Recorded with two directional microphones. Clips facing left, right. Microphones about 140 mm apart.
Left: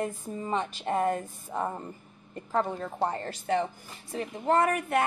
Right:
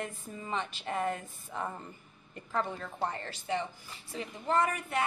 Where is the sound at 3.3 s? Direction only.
50° left (ahead or behind).